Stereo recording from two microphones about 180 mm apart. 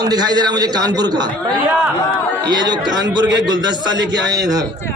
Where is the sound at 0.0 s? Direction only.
20° right (ahead or behind).